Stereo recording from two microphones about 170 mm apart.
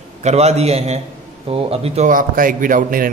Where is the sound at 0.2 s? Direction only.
40° right (ahead or behind).